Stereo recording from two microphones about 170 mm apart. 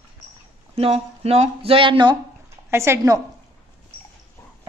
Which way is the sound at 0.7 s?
35° right (ahead or behind).